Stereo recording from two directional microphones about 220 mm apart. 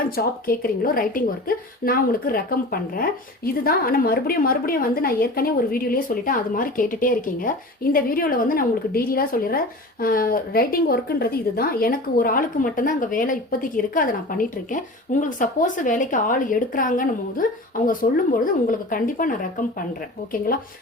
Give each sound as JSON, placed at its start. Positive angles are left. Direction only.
{"t": 0.2, "sound": "a woman's voice", "side_deg": 40}